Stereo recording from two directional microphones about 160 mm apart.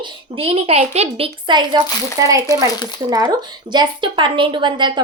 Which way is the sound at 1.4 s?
30° right (ahead or behind).